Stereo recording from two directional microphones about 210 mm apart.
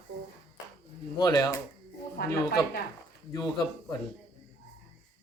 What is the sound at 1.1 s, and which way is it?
Speech, 15° left (ahead or behind).